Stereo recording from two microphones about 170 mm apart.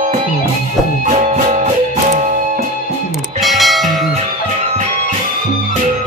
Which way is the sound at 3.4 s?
Centre (ahead or behind).